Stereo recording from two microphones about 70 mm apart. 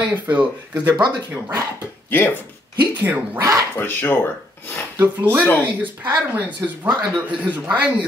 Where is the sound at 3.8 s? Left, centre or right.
Left.